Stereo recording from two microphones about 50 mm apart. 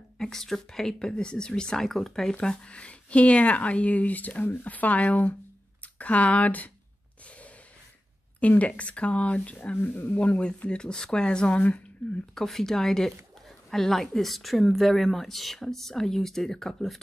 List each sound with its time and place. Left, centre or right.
0.2 s speech: centre
2.3 s speech: centre
8.4 s speech: left
9.8 s speech: left
10.1 s speech: left
10.7 s speech: centre
12.4 s speech: centre